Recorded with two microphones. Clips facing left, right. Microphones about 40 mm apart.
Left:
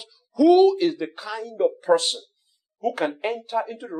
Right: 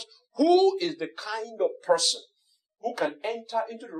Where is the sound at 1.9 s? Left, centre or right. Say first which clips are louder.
Left 4 dB; left.